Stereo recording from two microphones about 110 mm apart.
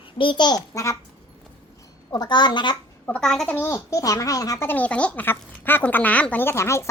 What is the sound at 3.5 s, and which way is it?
A child's voice, 25° left (ahead or behind).